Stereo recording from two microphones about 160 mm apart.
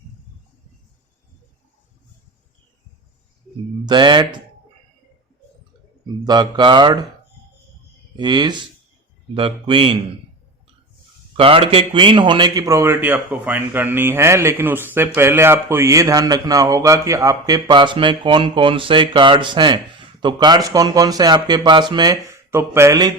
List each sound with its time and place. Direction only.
3.8 s a man's voice: 30° right (ahead or behind)
6.2 s a man's voice: 25° right (ahead or behind)
8.1 s a man's voice: 25° right (ahead or behind)
11.3 s a man's voice: 35° right (ahead or behind)